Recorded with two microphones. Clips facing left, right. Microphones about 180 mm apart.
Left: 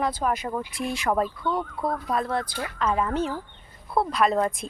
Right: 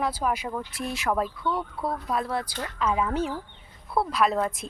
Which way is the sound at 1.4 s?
20° left (ahead or behind).